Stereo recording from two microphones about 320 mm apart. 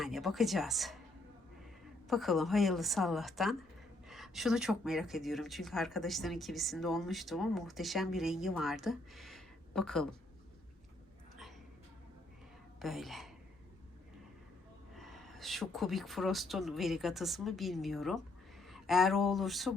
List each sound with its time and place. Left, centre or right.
0.0 s speech: centre
2.0 s speech: centre
12.8 s a woman's voice: centre
14.9 s speech: centre